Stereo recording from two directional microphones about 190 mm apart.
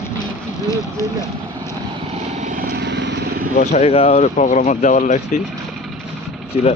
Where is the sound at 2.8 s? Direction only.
65° right (ahead or behind).